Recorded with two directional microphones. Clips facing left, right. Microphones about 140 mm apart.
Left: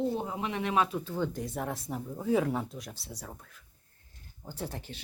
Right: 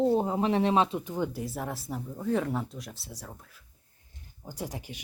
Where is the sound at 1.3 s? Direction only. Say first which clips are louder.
Even; 5° right (ahead or behind).